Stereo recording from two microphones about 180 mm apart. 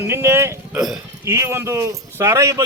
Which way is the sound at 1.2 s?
15° right (ahead or behind).